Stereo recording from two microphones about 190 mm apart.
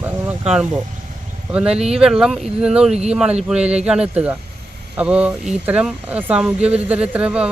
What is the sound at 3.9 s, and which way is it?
Speech, 5° right (ahead or behind).